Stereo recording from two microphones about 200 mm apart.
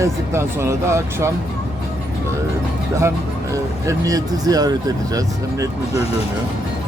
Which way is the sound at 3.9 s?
20° right (ahead or behind).